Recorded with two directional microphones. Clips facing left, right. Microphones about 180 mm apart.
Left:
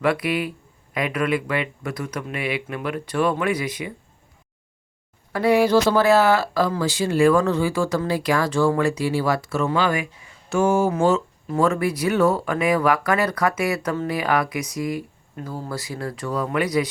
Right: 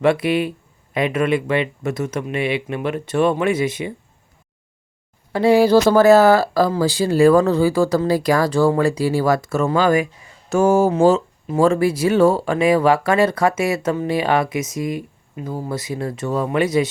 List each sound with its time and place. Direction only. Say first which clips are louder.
0.0 s speech: right 5 dB; 25° right (ahead or behind)
5.3 s speech: right 4 dB; 30° right (ahead or behind)
5.8 s speech: right 6 dB; 45° right (ahead or behind); by 16.9 s 25° right (ahead or behind)